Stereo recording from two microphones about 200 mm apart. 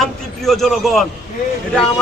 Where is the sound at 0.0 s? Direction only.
Centre (ahead or behind).